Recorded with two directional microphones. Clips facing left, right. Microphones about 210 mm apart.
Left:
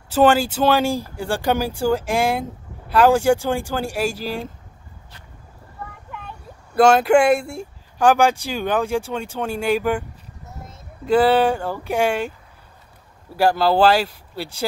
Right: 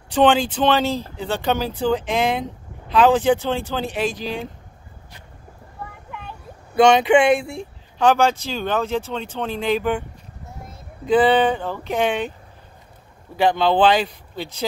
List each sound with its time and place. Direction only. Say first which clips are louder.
0.1 s speech: left 1 dB; 5° left (ahead or behind)
6.1 s speech: even; centre (ahead or behind)
11.1 s speech: even; 5° left (ahead or behind)
13.4 s speech: left 1 dB; 5° left (ahead or behind)